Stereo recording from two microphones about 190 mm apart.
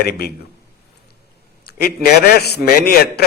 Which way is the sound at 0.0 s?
55° left (ahead or behind).